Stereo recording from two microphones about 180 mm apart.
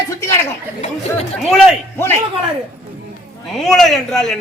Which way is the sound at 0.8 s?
40° left (ahead or behind).